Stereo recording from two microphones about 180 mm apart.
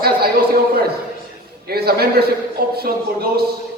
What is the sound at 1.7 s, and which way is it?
A man's voice, 60° right (ahead or behind).